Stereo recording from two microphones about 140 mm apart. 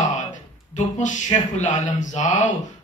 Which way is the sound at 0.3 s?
60° left (ahead or behind).